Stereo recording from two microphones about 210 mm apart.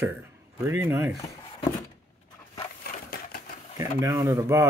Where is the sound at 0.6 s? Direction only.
10° right (ahead or behind).